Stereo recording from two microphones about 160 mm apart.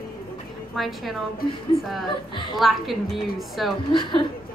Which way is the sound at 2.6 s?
Centre (ahead or behind).